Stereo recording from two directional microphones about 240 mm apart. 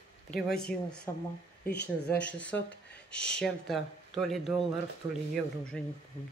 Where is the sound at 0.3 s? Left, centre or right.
Centre.